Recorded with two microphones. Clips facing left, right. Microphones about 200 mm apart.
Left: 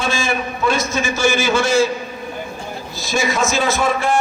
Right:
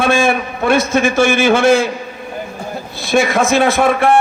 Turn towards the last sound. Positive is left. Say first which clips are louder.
# right 5 dB
turn(degrees=-60)  # may be behind; listen again after turning